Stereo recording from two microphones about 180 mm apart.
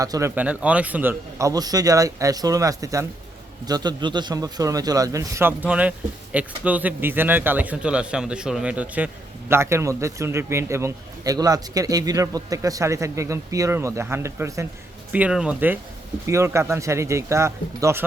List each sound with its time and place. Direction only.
0.0 s a man's voice: 15° right (ahead or behind)